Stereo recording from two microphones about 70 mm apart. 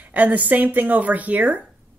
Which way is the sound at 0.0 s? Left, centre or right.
Right.